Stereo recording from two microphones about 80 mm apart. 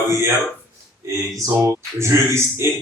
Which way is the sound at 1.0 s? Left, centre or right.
Right.